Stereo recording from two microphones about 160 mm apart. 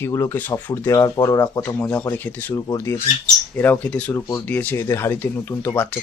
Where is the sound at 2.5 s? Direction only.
20° left (ahead or behind).